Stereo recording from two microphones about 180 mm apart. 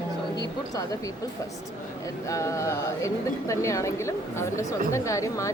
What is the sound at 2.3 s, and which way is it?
A woman's voice, 15° left (ahead or behind).